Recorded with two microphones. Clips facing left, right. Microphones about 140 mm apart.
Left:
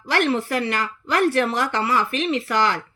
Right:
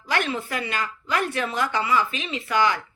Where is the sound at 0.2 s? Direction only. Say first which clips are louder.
Left 6 dB; 60° left (ahead or behind).